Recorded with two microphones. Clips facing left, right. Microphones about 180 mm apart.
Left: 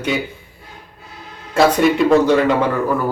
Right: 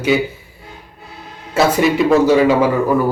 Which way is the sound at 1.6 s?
5° right (ahead or behind).